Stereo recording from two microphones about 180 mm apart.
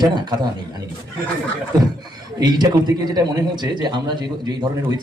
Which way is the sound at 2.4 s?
25° right (ahead or behind).